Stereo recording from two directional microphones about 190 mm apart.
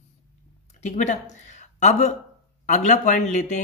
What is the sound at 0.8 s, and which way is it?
Speech, 40° left (ahead or behind).